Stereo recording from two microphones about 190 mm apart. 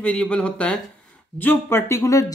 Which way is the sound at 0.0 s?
5° left (ahead or behind).